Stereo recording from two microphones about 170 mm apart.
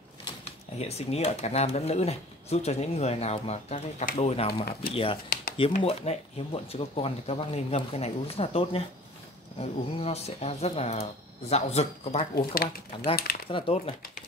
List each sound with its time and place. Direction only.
0.7 s speech: 40° left (ahead or behind)
12.4 s speech: 60° left (ahead or behind)
13.5 s speech: 30° left (ahead or behind)